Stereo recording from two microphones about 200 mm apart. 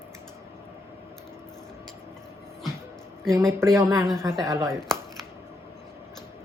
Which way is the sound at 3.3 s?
15° right (ahead or behind).